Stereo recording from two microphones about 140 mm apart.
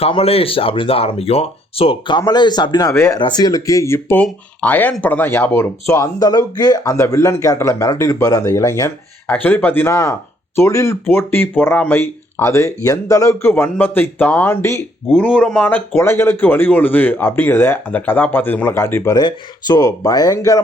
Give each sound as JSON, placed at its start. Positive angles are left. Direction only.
{"t": 0.0, "sound": "speech", "side_deg": 45}
{"t": 3.2, "sound": "speech", "side_deg": 30}